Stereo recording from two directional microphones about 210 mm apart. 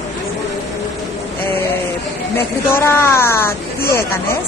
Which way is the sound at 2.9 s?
10° left (ahead or behind).